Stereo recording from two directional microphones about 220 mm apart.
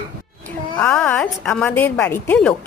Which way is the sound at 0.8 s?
5° left (ahead or behind).